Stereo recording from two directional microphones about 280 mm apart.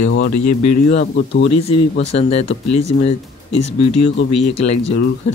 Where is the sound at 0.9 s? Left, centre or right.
Left.